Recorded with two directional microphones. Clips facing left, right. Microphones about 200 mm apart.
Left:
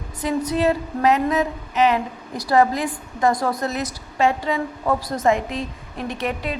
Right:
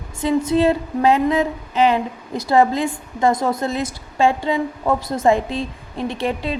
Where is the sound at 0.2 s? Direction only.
25° right (ahead or behind).